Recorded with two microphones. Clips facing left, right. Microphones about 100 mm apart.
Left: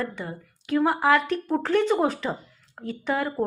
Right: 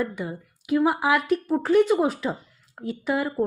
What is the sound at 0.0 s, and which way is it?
Speech, 10° right (ahead or behind).